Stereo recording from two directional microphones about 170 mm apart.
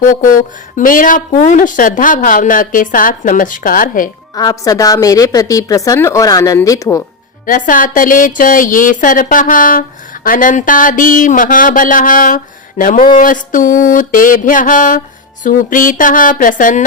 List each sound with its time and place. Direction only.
0.0 s a woman's voice: 55° left (ahead or behind)
4.4 s a woman's voice: 20° left (ahead or behind)
7.4 s a woman's voice: 50° left (ahead or behind)